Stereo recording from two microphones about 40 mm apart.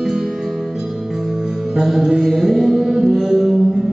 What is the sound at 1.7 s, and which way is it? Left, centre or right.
Music, centre.